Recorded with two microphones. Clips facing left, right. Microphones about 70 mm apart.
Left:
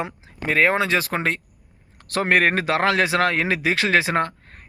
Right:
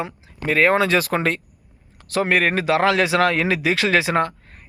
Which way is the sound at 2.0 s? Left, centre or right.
Left.